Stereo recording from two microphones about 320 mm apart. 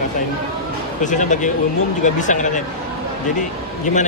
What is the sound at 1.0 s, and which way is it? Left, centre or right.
Speech, left.